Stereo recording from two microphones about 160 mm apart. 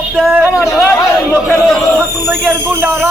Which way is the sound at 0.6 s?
15° left (ahead or behind).